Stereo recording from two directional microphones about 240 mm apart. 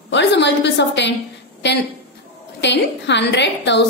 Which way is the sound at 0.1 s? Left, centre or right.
Left.